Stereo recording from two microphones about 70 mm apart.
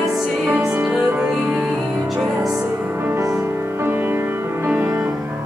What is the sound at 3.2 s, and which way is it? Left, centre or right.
Music, right.